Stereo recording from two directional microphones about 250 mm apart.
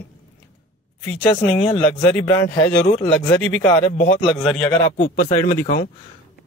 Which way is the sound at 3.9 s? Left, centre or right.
Left.